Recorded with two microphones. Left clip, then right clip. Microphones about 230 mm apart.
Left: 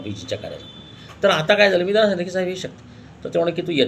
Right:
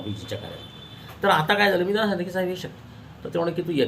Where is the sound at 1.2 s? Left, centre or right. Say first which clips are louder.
Left 4 dB; centre.